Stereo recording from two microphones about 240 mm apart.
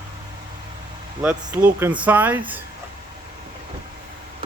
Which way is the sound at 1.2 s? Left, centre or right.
Centre.